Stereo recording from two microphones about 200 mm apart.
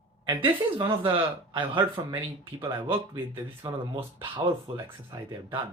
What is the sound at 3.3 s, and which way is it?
Speech, 20° right (ahead or behind).